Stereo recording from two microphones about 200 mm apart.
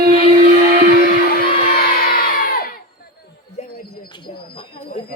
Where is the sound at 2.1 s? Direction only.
45° left (ahead or behind).